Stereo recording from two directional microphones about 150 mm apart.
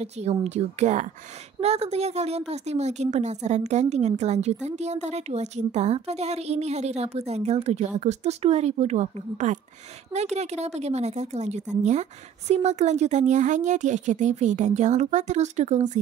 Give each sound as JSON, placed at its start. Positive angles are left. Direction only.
{"t": 0.0, "sound": "speech", "side_deg": -45}